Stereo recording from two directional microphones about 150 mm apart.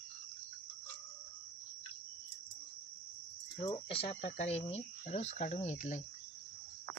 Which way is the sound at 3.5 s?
35° left (ahead or behind).